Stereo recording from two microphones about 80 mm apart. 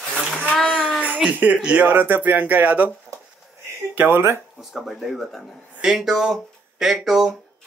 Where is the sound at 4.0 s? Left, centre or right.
Right.